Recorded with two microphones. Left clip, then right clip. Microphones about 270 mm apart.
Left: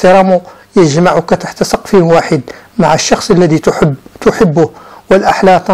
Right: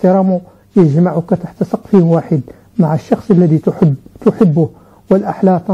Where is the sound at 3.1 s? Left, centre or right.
Centre.